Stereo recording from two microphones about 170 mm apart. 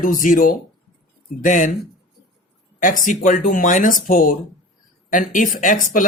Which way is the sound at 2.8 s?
50° left (ahead or behind).